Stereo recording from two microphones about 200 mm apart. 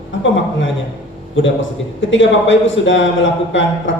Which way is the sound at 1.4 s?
75° left (ahead or behind).